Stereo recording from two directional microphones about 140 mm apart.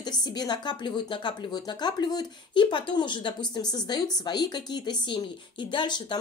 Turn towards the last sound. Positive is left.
turn(degrees=35)  # may be behind; listen again after turning